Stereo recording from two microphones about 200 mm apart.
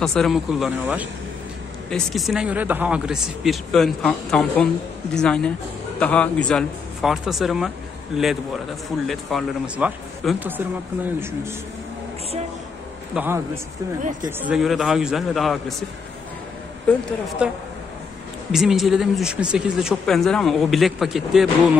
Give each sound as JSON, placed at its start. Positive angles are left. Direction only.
{"t": 0.0, "sound": "speech", "side_deg": 0}
{"t": 13.1, "sound": "a man's voice", "side_deg": -10}
{"t": 14.4, "sound": "speech", "side_deg": -5}
{"t": 16.9, "sound": "speech", "side_deg": 5}
{"t": 17.4, "sound": "speech", "side_deg": -5}